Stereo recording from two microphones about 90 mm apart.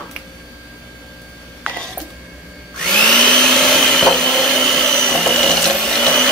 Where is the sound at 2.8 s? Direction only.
10° left (ahead or behind).